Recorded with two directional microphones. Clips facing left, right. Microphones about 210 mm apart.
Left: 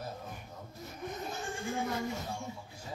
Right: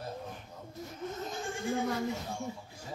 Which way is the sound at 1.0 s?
15° left (ahead or behind).